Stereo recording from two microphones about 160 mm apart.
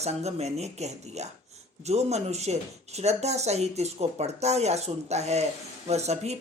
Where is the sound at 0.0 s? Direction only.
40° right (ahead or behind).